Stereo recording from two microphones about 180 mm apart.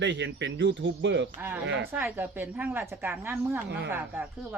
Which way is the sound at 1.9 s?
10° right (ahead or behind).